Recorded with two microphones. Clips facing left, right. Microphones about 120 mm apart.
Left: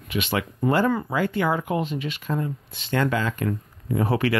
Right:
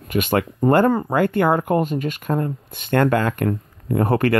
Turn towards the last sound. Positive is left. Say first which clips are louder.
# right 4 dB
turn(degrees=-50)  # may be behind; listen again after turning